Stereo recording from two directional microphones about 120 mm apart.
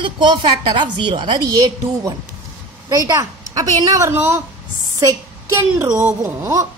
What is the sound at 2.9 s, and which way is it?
A woman's voice, 25° right (ahead or behind).